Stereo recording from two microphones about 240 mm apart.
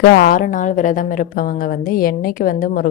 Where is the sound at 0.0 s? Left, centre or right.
Left.